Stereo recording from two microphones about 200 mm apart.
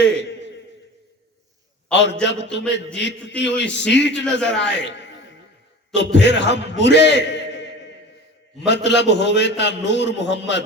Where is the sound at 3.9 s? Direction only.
60° left (ahead or behind).